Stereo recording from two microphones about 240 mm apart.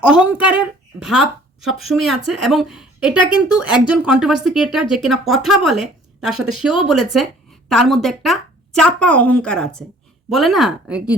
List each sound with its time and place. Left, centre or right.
0.0 s a woman's voice: centre